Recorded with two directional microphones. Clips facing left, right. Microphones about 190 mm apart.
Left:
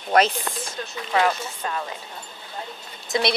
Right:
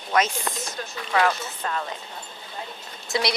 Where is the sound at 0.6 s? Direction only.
25° left (ahead or behind).